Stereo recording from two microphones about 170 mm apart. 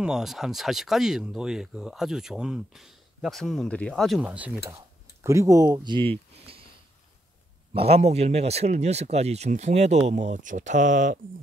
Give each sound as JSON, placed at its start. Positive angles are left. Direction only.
{"t": 0.0, "sound": "speech", "side_deg": 0}
{"t": 5.2, "sound": "speech", "side_deg": -20}
{"t": 7.7, "sound": "speech", "side_deg": -35}